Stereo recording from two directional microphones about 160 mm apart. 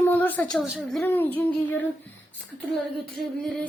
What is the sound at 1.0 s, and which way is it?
Speech, 15° left (ahead or behind).